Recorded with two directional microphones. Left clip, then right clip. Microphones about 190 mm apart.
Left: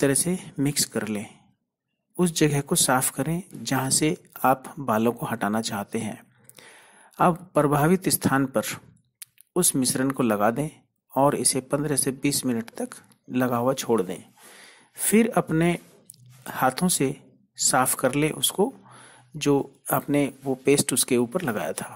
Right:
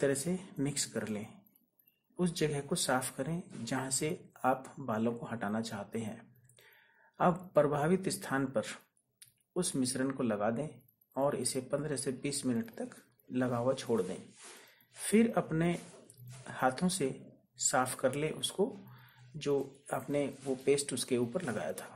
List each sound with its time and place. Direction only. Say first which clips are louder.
0.0 s speech: left 9 dB; 30° left (ahead or behind)